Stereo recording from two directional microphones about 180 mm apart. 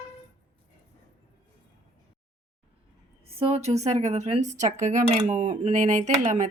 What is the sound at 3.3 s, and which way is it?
A woman's voice, 35° right (ahead or behind).